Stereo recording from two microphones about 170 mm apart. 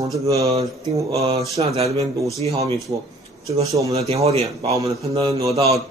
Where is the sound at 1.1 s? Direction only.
35° right (ahead or behind).